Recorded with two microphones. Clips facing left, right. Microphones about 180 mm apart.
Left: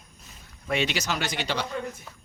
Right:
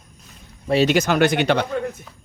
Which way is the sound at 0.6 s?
35° right (ahead or behind).